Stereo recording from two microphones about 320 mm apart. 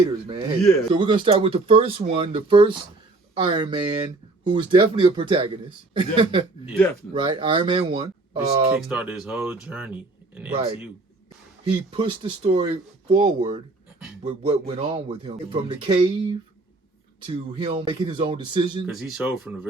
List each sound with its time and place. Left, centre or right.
0.3 s speech: centre
8.7 s speech: centre
11.7 s speech: centre
18.9 s speech: centre